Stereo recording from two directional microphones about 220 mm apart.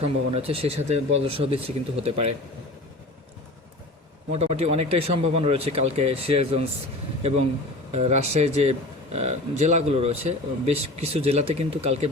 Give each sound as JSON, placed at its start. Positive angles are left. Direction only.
{"t": 0.4, "sound": "speech", "side_deg": -25}
{"t": 4.3, "sound": "speech", "side_deg": -30}